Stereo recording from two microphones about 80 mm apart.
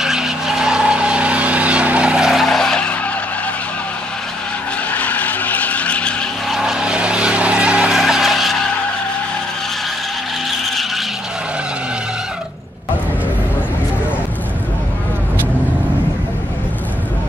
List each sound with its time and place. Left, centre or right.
0.0 s vehicle: centre
2.4 s skidding: centre
4.9 s skidding: centre
6.5 s vehicle: centre
10.6 s skidding: centre